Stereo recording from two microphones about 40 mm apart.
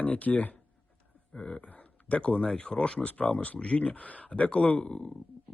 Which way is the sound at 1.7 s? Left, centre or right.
Left.